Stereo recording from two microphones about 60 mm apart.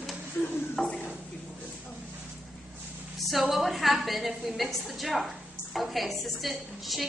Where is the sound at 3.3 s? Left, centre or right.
Centre.